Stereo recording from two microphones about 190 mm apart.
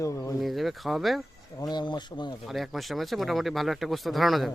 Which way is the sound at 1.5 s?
20° left (ahead or behind).